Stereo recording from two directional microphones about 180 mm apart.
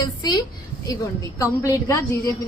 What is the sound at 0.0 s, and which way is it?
A woman's voice, 25° left (ahead or behind).